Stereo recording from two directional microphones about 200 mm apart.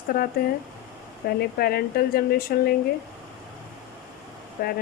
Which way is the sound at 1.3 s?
50° left (ahead or behind).